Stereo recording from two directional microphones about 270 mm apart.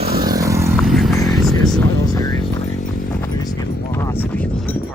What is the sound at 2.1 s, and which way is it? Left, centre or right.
Music, centre.